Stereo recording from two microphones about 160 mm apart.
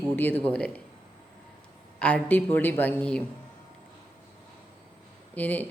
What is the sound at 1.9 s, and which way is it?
A woman's voice, 10° left (ahead or behind).